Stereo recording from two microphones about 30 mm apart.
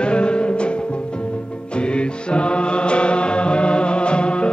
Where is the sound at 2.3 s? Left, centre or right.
Left.